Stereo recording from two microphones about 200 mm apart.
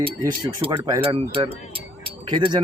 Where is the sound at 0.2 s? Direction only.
15° right (ahead or behind).